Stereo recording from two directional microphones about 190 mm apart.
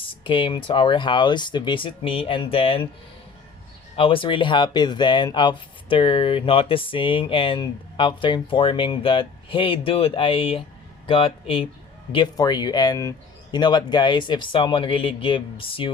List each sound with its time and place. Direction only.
0.0 s speech: 25° left (ahead or behind)
3.9 s speech: 30° left (ahead or behind)